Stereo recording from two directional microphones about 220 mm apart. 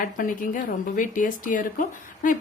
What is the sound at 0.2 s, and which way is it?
A woman's voice, 35° left (ahead or behind).